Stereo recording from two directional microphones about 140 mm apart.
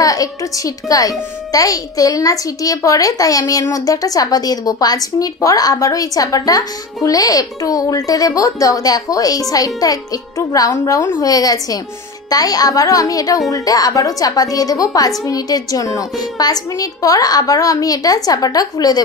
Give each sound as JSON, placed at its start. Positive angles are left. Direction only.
{"t": 0.0, "sound": "speech", "side_deg": 25}